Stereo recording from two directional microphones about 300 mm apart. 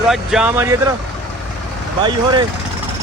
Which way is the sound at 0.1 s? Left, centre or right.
Centre.